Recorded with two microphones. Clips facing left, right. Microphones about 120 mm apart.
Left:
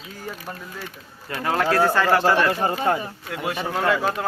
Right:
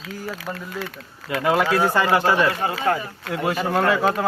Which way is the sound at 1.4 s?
10° right (ahead or behind).